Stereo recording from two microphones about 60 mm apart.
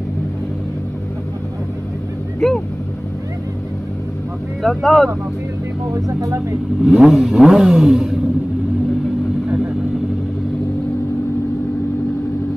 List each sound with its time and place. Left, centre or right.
2.4 s speech: centre
4.6 s speech: centre
5.9 s speech: right
6.8 s roar: centre